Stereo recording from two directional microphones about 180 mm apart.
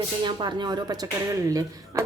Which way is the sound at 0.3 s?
25° right (ahead or behind).